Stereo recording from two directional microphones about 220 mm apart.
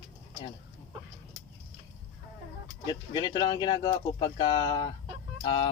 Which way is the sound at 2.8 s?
20° left (ahead or behind).